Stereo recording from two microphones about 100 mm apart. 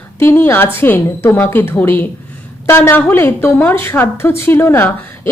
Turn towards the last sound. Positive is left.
turn(degrees=25)  # may be behind; listen again after turning